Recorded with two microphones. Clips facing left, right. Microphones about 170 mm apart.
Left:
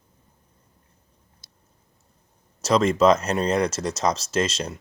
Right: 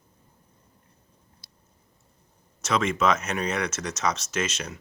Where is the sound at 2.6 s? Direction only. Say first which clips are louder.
Left 6 dB; 35° left (ahead or behind).